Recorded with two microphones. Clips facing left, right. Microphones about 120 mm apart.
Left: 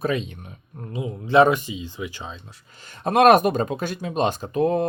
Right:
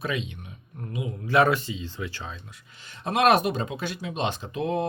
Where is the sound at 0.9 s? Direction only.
25° left (ahead or behind).